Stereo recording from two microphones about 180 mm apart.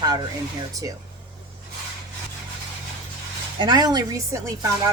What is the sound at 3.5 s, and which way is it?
Speech, 20° right (ahead or behind).